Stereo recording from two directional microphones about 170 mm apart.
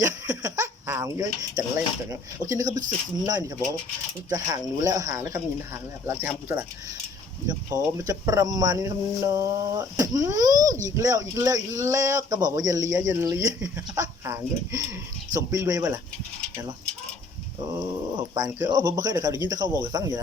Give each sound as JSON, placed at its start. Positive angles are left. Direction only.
{"t": 0.0, "sound": "a sound", "side_deg": -20}
{"t": 2.0, "sound": "speech", "side_deg": -20}
{"t": 17.7, "sound": "speech", "side_deg": -25}